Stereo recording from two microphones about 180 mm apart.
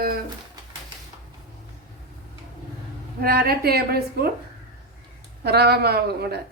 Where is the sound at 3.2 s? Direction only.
55° right (ahead or behind).